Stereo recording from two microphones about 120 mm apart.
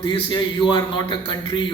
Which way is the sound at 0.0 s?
40° left (ahead or behind).